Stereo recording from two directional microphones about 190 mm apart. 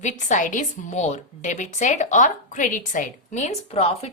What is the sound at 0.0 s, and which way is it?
A woman's voice, 40° left (ahead or behind).